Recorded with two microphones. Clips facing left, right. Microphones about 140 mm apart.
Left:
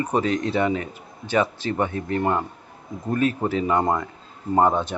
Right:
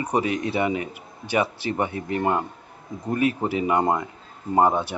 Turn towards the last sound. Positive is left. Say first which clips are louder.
# even
turn(degrees=-10)  # may be behind; listen again after turning